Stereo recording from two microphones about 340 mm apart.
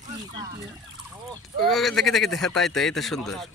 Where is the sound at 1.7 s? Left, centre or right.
Centre.